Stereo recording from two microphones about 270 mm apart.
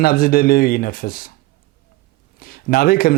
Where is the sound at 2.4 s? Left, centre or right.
Left.